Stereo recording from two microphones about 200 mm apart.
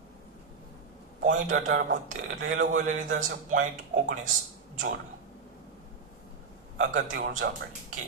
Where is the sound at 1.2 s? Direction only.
40° right (ahead or behind).